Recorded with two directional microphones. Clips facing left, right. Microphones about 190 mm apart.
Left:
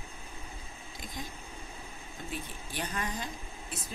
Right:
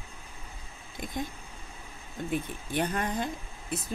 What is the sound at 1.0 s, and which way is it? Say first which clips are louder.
Speech: right 8 dB; 55° right (ahead or behind).